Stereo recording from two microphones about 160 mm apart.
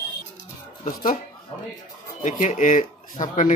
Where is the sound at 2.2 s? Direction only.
50° left (ahead or behind).